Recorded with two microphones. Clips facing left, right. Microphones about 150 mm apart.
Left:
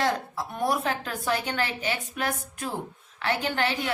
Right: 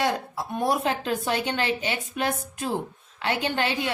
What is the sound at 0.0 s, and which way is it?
A woman's voice, 20° right (ahead or behind).